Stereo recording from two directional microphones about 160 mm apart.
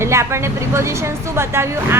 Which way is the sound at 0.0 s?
15° right (ahead or behind).